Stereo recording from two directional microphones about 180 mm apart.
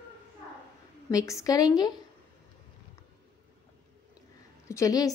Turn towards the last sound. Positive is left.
turn(degrees=20)  # may be behind; listen again after turning